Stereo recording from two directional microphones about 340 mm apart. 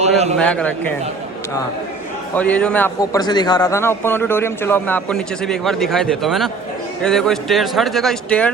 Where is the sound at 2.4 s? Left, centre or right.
Centre.